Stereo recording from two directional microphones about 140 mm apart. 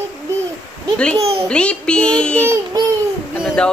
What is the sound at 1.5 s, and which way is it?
Child singing, 5° left (ahead or behind).